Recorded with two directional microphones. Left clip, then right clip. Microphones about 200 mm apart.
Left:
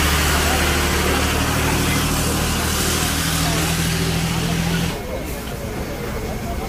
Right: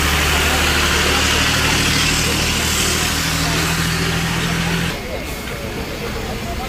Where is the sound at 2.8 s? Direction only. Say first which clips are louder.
Right 3 dB; 35° left (ahead or behind).